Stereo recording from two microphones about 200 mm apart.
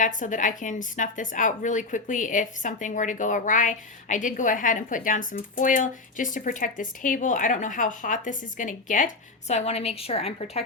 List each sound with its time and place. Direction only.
0.0 s speech: 40° left (ahead or behind)